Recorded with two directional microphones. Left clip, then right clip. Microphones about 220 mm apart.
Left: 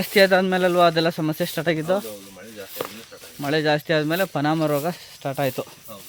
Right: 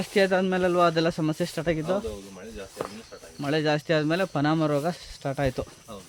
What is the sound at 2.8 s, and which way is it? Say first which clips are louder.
Snake: left 3 dB; 50° left (ahead or behind).